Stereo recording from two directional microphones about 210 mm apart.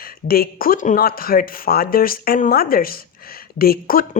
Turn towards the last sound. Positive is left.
turn(degrees=45)  # may be behind; listen again after turning